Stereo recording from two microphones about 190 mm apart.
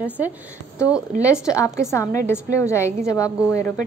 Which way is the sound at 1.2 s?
15° left (ahead or behind).